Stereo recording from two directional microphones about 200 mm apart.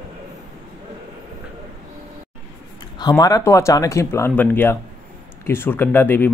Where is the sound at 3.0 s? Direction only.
20° left (ahead or behind).